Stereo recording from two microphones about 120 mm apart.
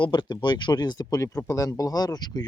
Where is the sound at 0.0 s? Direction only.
40° left (ahead or behind).